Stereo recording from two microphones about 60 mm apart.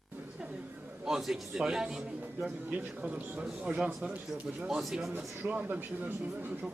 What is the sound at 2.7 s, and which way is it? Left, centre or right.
Speech, right.